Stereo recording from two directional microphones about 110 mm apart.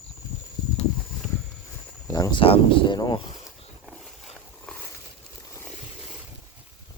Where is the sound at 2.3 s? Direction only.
55° left (ahead or behind).